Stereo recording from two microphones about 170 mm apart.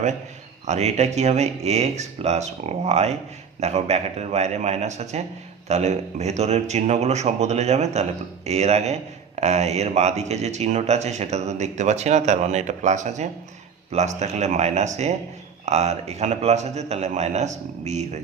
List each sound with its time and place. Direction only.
0.7 s speech: 40° right (ahead or behind)